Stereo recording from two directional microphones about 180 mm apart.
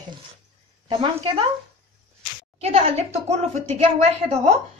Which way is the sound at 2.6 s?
35° right (ahead or behind).